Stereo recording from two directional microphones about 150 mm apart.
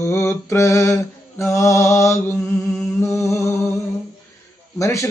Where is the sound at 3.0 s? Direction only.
20° left (ahead or behind).